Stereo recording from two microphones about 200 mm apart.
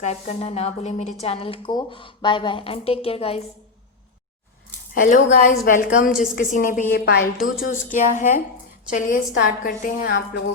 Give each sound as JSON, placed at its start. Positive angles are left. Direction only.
{"t": 0.0, "sound": "a woman's voice", "side_deg": 35}
{"t": 4.9, "sound": "a woman's voice", "side_deg": 45}
{"t": 7.7, "sound": "a woman's voice", "side_deg": 40}